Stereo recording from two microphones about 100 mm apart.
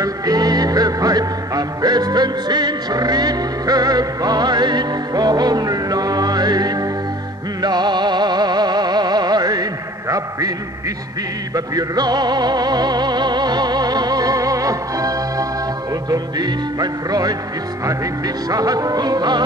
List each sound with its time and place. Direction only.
0.0 s music: 40° right (ahead or behind)
11.5 s music: 40° right (ahead or behind)